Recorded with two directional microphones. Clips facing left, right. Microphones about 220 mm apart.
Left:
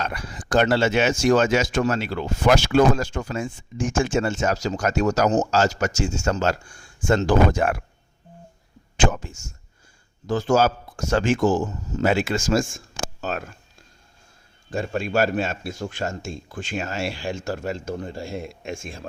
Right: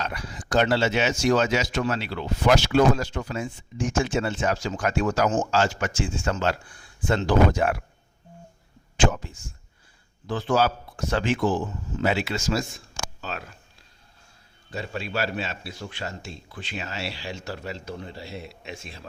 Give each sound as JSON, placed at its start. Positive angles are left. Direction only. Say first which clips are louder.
{"t": 0.0, "sound": "speech", "louder": "left 2 dB", "side_deg": 50}
{"t": 9.0, "sound": "speech", "louder": "left 1 dB", "side_deg": 50}
{"t": 14.7, "sound": "speech", "louder": "left 7 dB", "side_deg": 50}